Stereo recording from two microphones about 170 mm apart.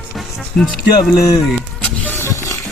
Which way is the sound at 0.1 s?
Centre (ahead or behind).